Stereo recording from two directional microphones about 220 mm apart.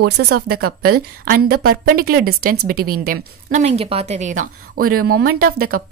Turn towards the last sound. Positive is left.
turn(degrees=-40)  # may be behind; listen again after turning